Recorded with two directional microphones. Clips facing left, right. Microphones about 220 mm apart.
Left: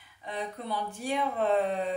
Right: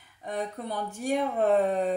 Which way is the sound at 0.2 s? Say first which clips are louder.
Right 3 dB; 45° right (ahead or behind).